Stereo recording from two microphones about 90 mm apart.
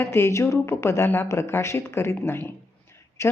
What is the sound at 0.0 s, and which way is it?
A woman's voice, 30° left (ahead or behind).